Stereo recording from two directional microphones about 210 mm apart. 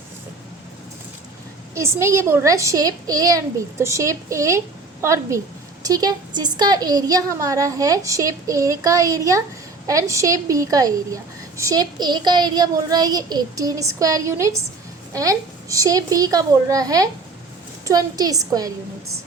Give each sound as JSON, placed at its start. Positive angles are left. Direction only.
{"t": 1.7, "sound": "a woman's voice", "side_deg": -15}